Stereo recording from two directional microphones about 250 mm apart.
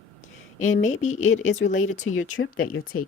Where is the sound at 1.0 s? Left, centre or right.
Left.